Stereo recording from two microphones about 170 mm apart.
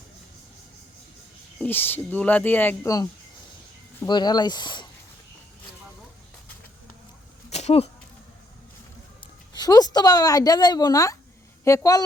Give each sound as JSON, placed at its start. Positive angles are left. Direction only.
{"t": 1.5, "sound": "speech", "side_deg": 10}
{"t": 7.5, "sound": "a sound", "side_deg": 40}
{"t": 9.6, "sound": "speech", "side_deg": 20}